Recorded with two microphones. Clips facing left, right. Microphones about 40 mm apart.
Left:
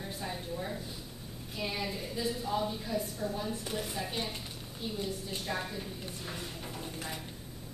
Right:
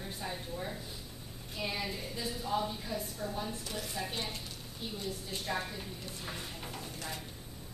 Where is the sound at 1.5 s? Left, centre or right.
Centre.